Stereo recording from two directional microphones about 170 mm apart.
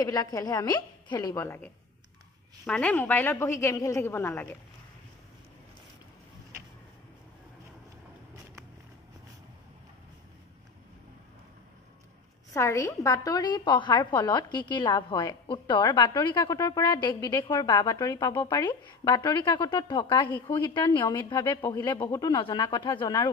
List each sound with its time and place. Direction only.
0.0 s a woman's voice: 20° left (ahead or behind)
12.5 s a woman's voice: 15° left (ahead or behind)